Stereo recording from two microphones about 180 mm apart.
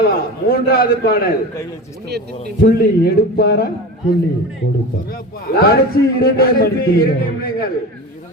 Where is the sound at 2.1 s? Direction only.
65° right (ahead or behind).